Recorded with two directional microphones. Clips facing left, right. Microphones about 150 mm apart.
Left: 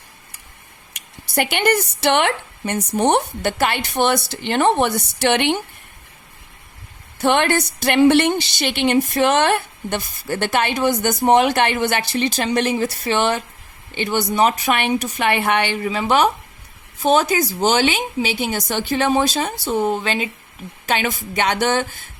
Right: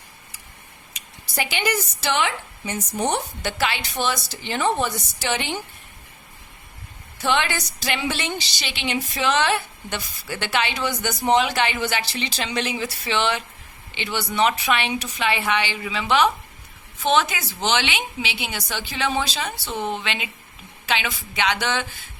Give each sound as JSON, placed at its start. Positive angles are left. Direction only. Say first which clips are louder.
{"t": 0.9, "sound": "a woman's voice", "louder": "left 7 dB", "side_deg": 60}
{"t": 7.2, "sound": "a woman's voice", "louder": "left 6 dB", "side_deg": 55}